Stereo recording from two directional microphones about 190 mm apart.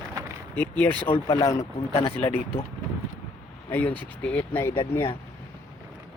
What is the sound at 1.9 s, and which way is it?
Speech, 35° left (ahead or behind).